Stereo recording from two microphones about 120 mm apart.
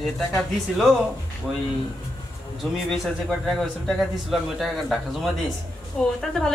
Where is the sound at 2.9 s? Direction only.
Centre (ahead or behind).